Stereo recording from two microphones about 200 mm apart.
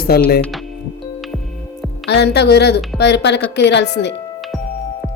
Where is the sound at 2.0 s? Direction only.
55° left (ahead or behind).